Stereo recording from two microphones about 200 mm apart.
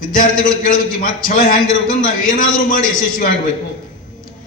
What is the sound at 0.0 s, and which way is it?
A man's voice, 45° left (ahead or behind).